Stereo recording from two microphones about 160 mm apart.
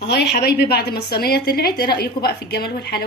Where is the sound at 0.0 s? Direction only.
90° left.